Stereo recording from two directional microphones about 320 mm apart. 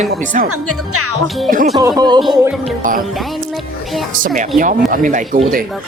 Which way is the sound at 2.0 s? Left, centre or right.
Centre.